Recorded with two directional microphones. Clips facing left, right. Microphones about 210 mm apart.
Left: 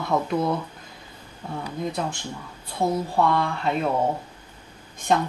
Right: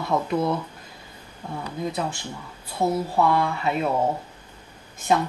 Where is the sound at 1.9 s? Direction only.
5° right (ahead or behind).